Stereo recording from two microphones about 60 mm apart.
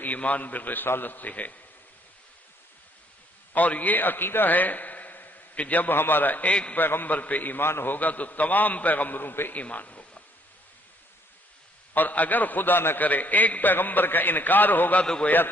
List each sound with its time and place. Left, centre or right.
0.0 s a man's voice: left
3.5 s a man's voice: left
6.7 s a man's voice: left
7.9 s a man's voice: left
9.6 s a sound: left
11.9 s a man's voice: left
15.0 s a man's voice: centre